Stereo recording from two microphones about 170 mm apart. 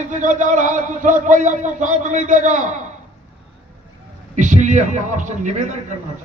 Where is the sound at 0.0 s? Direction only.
45° right (ahead or behind).